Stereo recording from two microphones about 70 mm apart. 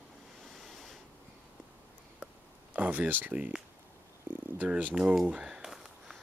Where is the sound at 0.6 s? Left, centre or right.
Centre.